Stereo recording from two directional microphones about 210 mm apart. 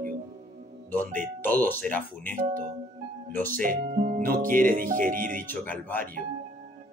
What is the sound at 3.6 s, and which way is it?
Music, 40° right (ahead or behind).